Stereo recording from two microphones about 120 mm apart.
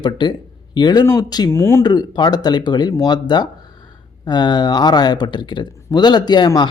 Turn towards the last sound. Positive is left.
turn(degrees=40)  # may be behind; listen again after turning